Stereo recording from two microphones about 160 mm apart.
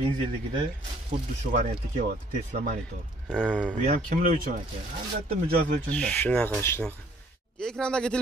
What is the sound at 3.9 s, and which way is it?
Speech, 55° right (ahead or behind).